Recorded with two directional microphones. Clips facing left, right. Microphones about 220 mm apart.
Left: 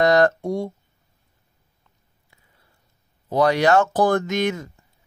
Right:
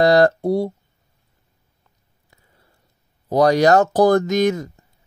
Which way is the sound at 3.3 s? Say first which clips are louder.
Right 4 dB; 40° right (ahead or behind).